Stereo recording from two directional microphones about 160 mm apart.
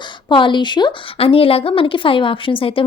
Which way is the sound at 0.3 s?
30° left (ahead or behind).